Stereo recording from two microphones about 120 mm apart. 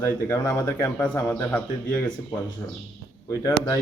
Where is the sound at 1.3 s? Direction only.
10° left (ahead or behind).